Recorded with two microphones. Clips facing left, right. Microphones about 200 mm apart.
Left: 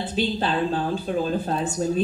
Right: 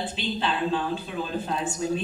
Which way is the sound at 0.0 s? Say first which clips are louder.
Left 4 dB; 40° left (ahead or behind).